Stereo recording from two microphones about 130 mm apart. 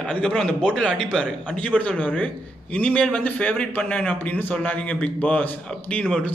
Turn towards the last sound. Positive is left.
turn(degrees=5)  # may be behind; listen again after turning